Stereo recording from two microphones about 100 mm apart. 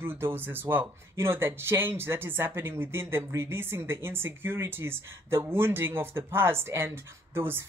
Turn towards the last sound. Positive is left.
turn(degrees=-25)  # may be behind; listen again after turning